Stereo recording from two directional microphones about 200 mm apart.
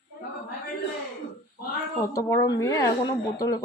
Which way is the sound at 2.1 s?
15° left (ahead or behind).